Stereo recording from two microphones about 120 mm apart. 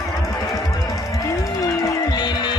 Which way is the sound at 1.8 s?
35° left (ahead or behind).